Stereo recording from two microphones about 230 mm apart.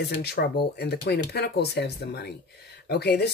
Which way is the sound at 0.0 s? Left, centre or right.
Left.